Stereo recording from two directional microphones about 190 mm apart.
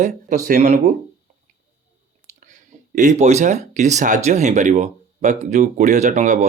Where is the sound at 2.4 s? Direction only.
40° right (ahead or behind).